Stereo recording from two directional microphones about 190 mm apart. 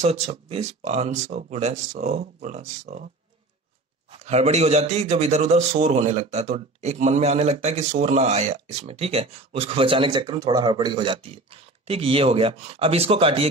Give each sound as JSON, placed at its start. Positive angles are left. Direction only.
{"t": 0.0, "sound": "a man's voice", "side_deg": -35}
{"t": 4.1, "sound": "a man's voice", "side_deg": -35}